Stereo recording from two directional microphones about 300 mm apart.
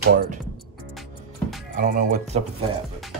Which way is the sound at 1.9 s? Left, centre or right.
Right.